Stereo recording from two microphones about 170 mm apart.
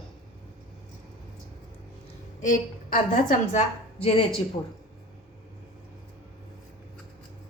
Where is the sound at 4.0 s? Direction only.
35° left (ahead or behind).